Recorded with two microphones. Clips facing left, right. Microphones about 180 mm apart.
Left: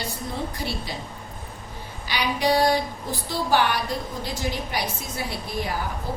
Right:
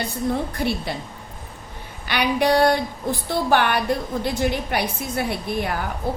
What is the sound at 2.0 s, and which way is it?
A woman's voice, 60° right (ahead or behind).